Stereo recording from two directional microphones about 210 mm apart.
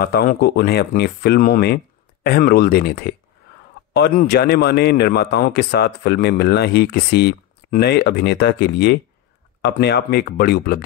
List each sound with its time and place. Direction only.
0.0 s a man's voice: 45° left (ahead or behind)